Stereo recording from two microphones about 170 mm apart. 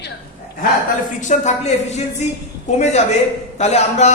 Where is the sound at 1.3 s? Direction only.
40° left (ahead or behind).